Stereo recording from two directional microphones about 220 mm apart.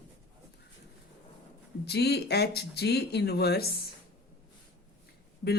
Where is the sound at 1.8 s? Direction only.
50° left (ahead or behind).